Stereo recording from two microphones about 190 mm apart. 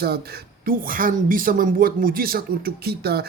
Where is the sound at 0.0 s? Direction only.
55° right (ahead or behind).